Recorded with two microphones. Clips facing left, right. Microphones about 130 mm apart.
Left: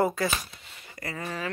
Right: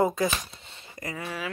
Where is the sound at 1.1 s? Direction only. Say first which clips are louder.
Left 1 dB; 10° right (ahead or behind).